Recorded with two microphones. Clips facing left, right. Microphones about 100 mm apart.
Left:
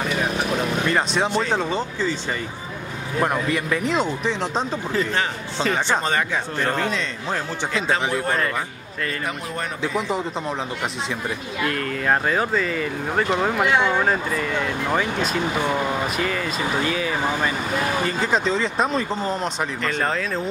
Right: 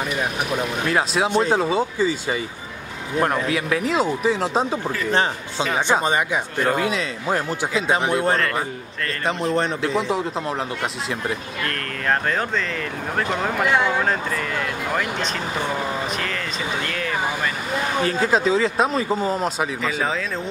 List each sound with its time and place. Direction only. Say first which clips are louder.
0.8 s speech: right 3 dB; 5° right (ahead or behind)
1.3 s a man's voice: right 3 dB; 15° right (ahead or behind)
5.9 s a man's voice: right 2 dB; 15° right (ahead or behind)
9.8 s speech: right 2 dB; centre (ahead or behind)